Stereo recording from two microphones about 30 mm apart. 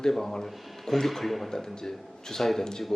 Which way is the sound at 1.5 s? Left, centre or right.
Centre.